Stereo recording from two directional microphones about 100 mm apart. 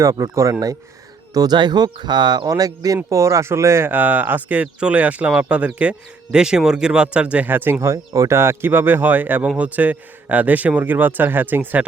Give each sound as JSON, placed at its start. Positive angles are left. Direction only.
{"t": 0.0, "sound": "a man's voice", "side_deg": -30}